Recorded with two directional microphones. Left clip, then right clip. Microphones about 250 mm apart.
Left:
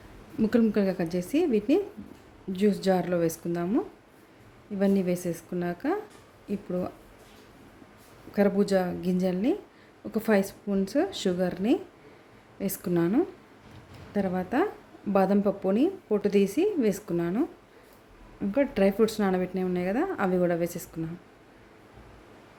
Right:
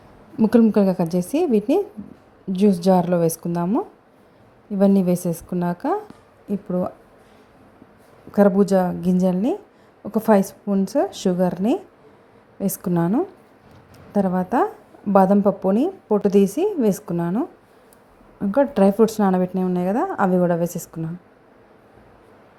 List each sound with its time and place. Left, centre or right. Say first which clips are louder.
0.3 s a woman's voice: right 8 dB; centre
4.8 s a woman's voice: right 8 dB; centre
8.4 s a woman's voice: right 8 dB; centre
18.7 s a woman's voice: right 7 dB; centre